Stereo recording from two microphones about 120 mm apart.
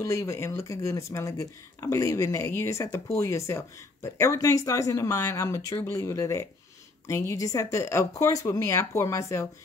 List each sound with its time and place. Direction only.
0.0 s speech: 25° left (ahead or behind)